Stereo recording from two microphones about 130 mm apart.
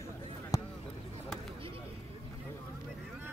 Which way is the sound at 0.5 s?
25° left (ahead or behind).